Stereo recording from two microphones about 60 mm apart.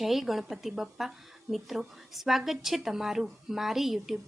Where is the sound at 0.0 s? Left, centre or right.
Centre.